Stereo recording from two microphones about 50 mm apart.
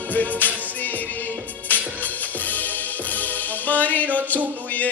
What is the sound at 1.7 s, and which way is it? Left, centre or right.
Music, left.